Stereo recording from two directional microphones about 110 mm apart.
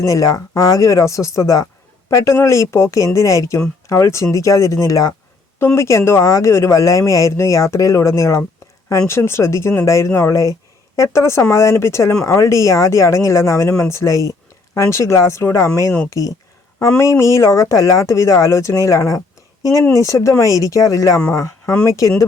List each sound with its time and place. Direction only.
0.0 s speech: 30° left (ahead or behind)